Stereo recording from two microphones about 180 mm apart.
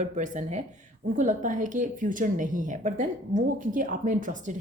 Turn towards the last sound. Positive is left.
turn(degrees=-45)  # may be behind; listen again after turning